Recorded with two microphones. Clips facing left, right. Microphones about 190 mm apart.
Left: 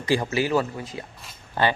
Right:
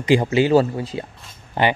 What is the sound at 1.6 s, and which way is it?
Speech, 20° right (ahead or behind).